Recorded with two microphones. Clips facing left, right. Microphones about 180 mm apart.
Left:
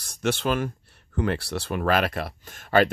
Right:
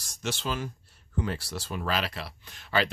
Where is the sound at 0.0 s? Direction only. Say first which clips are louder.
Left 8 dB; 60° left (ahead or behind).